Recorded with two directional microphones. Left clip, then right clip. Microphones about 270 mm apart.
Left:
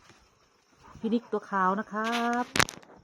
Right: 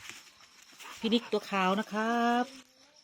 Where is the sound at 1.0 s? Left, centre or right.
Centre.